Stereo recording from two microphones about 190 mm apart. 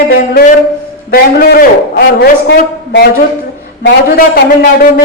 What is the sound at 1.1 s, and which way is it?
A woman's voice, 50° left (ahead or behind).